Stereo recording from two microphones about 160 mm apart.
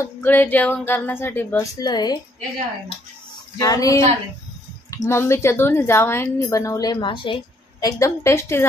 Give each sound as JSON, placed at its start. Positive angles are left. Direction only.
{"t": 0.2, "sound": "a woman's voice", "side_deg": 10}
{"t": 1.8, "sound": "a woman's voice", "side_deg": 25}
{"t": 3.5, "sound": "a woman's voice", "side_deg": 20}
{"t": 7.8, "sound": "a woman's voice", "side_deg": 20}